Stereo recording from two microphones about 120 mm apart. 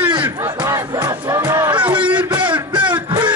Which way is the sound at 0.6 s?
25° right (ahead or behind).